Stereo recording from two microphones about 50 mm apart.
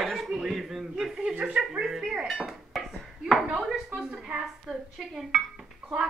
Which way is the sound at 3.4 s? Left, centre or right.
Centre.